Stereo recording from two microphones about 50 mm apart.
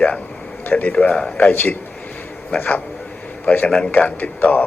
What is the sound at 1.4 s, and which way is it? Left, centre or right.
Speech, left.